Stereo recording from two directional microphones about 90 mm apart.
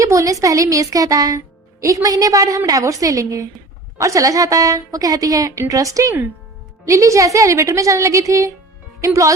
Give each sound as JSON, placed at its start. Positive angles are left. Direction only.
{"t": 0.0, "sound": "a woman's voice", "side_deg": -35}